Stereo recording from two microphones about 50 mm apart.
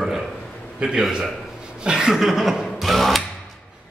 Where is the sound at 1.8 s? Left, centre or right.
Centre.